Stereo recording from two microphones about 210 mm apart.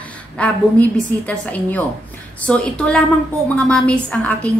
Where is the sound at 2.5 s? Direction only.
5° left (ahead or behind).